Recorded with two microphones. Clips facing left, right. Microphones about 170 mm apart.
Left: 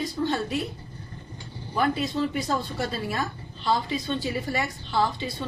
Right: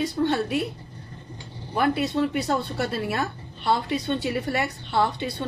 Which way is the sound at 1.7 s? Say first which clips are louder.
Right 2 dB; 65° right (ahead or behind).